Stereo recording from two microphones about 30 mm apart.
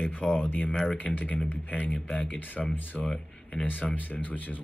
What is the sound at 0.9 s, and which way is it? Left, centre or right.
Speech, left.